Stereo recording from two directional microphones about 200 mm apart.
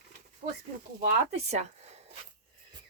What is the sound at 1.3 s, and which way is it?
Speech, 35° right (ahead or behind).